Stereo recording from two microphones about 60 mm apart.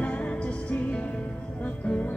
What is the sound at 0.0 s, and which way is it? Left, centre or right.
Music, left.